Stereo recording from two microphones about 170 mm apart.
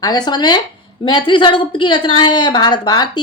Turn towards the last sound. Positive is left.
turn(degrees=25)  # may be behind; listen again after turning